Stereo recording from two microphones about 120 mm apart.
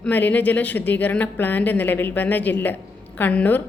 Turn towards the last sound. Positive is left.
turn(degrees=15)  # may be behind; listen again after turning